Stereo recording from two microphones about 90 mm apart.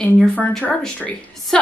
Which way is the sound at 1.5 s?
5° left (ahead or behind).